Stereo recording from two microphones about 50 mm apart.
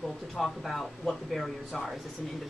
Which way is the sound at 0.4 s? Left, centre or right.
Centre.